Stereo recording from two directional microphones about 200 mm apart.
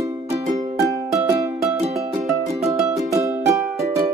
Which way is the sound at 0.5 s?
35° right (ahead or behind).